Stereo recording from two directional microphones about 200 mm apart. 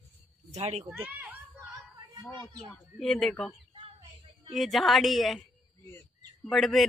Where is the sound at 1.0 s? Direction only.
10° right (ahead or behind).